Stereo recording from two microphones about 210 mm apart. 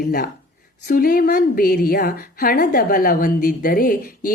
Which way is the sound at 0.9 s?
45° left (ahead or behind).